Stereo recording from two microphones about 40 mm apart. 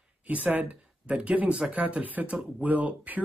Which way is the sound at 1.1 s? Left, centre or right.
Right.